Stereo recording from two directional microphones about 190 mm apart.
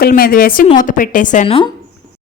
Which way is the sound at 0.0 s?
50° left (ahead or behind).